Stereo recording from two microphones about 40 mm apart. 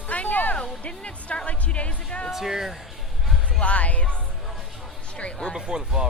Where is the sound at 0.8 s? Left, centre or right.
Left.